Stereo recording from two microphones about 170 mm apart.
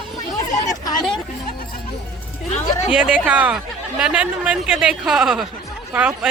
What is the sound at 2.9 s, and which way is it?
A man's voice, 5° right (ahead or behind).